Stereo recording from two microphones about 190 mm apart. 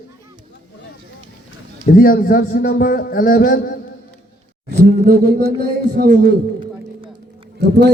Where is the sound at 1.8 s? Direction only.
50° left (ahead or behind).